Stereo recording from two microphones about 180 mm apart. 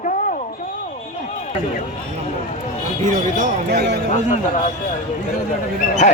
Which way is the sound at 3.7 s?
70° right (ahead or behind).